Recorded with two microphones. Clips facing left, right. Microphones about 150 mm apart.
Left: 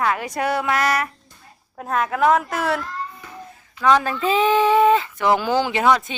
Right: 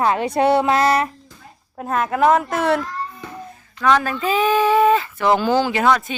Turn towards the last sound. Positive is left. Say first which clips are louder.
# right 1 dB
turn(degrees=20)  # may be behind; listen again after turning